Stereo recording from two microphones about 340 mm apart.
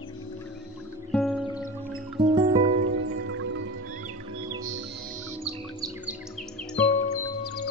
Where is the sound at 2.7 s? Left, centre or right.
Right.